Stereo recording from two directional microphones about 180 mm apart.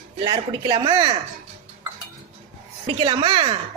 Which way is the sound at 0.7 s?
20° right (ahead or behind).